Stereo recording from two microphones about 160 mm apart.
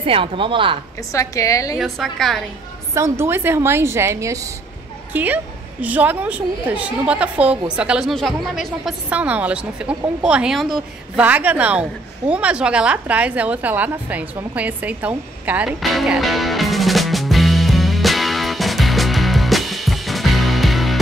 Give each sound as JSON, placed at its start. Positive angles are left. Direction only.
{"t": 0.0, "sound": "speech", "side_deg": -35}
{"t": 1.1, "sound": "a woman's voice", "side_deg": 20}
{"t": 1.8, "sound": "a woman's voice", "side_deg": 0}
{"t": 2.9, "sound": "a woman's voice", "side_deg": -15}
{"t": 11.2, "sound": "a sound", "side_deg": -10}